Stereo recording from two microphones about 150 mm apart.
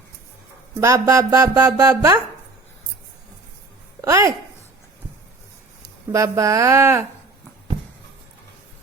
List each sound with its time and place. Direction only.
0.8 s music: 20° right (ahead or behind)
4.0 s music: 20° right (ahead or behind)
5.8 s speech: 20° right (ahead or behind)